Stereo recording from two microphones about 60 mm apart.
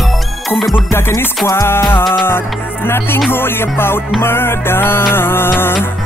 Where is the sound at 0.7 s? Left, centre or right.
Left.